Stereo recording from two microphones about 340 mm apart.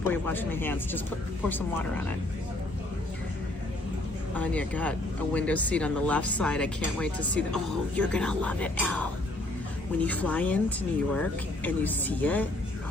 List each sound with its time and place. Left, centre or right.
0.0 s speech: centre
4.4 s speech: centre